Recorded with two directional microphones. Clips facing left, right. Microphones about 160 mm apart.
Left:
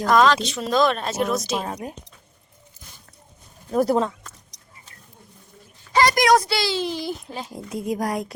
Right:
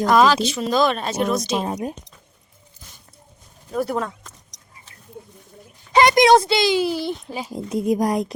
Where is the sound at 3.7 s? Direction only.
45° left (ahead or behind).